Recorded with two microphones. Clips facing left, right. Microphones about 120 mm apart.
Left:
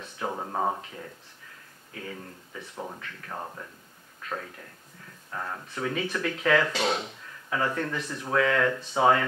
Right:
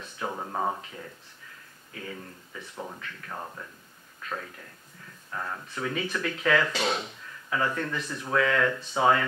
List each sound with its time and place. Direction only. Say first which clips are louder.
0.0 s a sound: left 1 dB; 30° left (ahead or behind)
0.8 s speech: left 1 dB; 30° left (ahead or behind)
2.1 s speech: left 1 dB; 25° left (ahead or behind)
3.0 s speech: even; 40° left (ahead or behind)
3.3 s speech: left 3 dB; 30° left (ahead or behind)